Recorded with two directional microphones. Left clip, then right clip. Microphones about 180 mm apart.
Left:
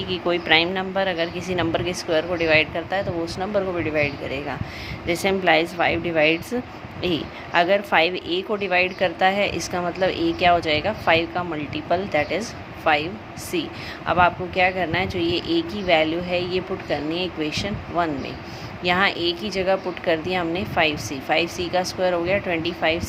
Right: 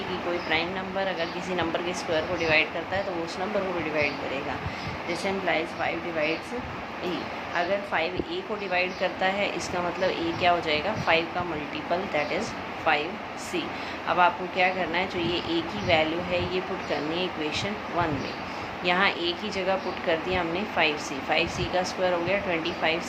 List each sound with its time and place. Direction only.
0.4 s speech: 60° left (ahead or behind)
5.0 s speech: 60° left (ahead or behind)
14.1 s speech: 50° left (ahead or behind)